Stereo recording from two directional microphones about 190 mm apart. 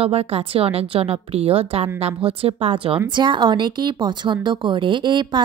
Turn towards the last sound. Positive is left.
turn(degrees=-25)  # may be behind; listen again after turning